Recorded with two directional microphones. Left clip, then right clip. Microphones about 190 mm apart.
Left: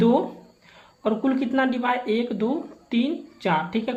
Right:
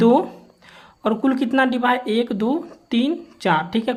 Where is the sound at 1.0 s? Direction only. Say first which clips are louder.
Right 3 dB; 45° right (ahead or behind).